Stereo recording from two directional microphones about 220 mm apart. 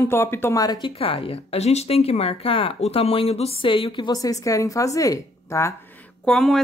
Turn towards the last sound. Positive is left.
turn(degrees=0)  # may be behind; listen again after turning